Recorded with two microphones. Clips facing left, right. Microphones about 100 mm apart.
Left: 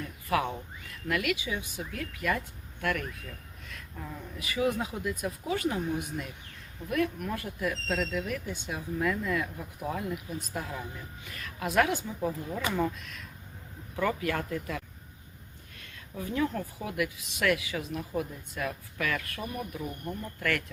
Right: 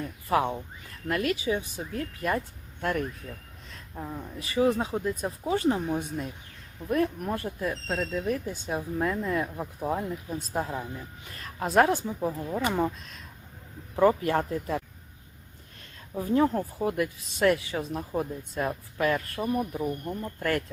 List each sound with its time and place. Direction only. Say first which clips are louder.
0.3 s speech: right 3 dB; 30° right (ahead or behind)
16.1 s speech: right 6 dB; 35° right (ahead or behind)